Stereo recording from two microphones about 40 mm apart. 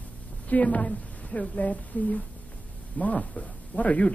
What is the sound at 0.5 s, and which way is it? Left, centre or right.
A woman's voice, left.